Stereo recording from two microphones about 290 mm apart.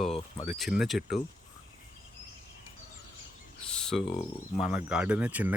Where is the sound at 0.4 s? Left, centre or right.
Centre.